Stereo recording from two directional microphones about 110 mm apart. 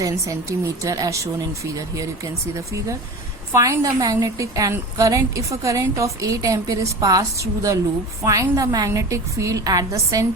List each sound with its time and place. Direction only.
0.0 s a woman's voice: 30° right (ahead or behind)
3.5 s a woman's voice: 30° right (ahead or behind)